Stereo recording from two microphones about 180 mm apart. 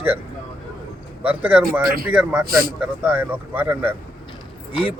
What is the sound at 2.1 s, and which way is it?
Speech, 5° right (ahead or behind).